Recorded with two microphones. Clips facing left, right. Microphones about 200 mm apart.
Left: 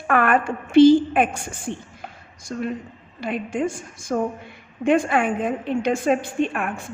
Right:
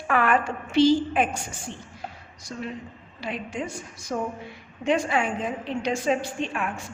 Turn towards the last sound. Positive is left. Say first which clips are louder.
# left 6 dB
turn(degrees=55)  # may be behind; listen again after turning